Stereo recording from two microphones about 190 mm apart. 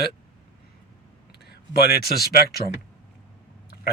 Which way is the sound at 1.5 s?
55° left (ahead or behind).